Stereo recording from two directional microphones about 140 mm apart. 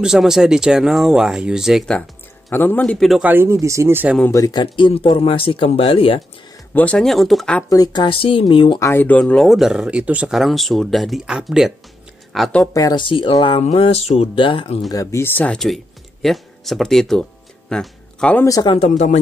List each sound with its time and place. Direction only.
0.0 s speech: 5° right (ahead or behind)
2.5 s speech: 15° left (ahead or behind)
3.3 s speech: 15° right (ahead or behind)
4.3 s speech: 25° left (ahead or behind); by 6.2 s 40° left (ahead or behind)
6.7 s speech: 10° left (ahead or behind)
7.7 s speech: 30° left (ahead or behind)
8.7 s speech: 15° left (ahead or behind); by 12.6 s centre (ahead or behind)
12.7 s speech: 25° left (ahead or behind)
13.0 s speech: 35° left (ahead or behind)
14.9 s speech: 25° left (ahead or behind); by 18.4 s 5° left (ahead or behind)
18.4 s speech: 25° left (ahead or behind)
18.9 s speech: 65° left (ahead or behind)